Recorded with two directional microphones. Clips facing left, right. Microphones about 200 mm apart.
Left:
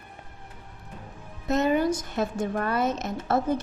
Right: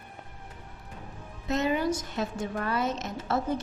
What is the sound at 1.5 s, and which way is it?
A woman's voice, 50° left (ahead or behind).